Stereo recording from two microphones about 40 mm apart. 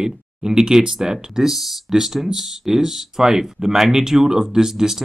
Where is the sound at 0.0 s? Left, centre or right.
Centre.